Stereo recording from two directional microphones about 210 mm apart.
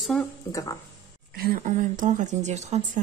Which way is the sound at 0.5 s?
15° left (ahead or behind).